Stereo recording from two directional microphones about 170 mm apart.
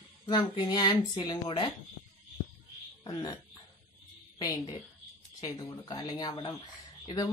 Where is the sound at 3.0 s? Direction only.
25° left (ahead or behind).